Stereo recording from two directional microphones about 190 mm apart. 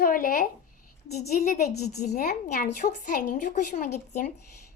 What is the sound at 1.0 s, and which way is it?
Speech, 60° left (ahead or behind).